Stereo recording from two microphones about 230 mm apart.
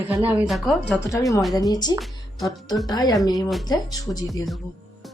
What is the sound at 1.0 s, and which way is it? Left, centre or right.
A woman's voice, centre.